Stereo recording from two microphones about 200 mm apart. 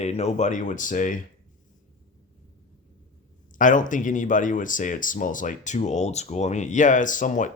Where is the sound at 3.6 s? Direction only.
40° left (ahead or behind).